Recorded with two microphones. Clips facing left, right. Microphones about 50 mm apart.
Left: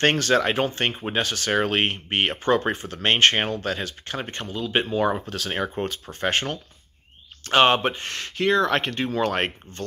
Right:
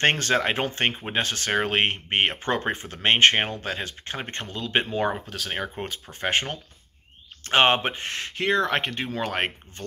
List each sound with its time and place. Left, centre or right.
0.0 s speech: right
4.5 s speech: right
5.1 s speech: centre
6.1 s speech: centre
7.4 s speech: right; by 9.8 s centre